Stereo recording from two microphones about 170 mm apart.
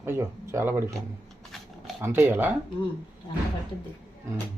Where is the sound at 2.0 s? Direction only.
15° right (ahead or behind).